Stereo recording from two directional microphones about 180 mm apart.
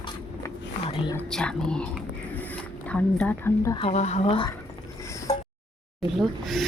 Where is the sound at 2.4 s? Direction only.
10° left (ahead or behind).